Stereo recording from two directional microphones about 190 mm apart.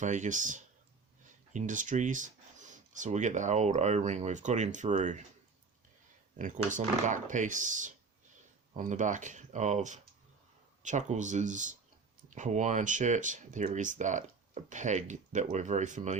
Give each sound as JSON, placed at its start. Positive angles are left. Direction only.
{"t": 0.0, "sound": "speech", "side_deg": -40}
{"t": 6.3, "sound": "speech", "side_deg": -40}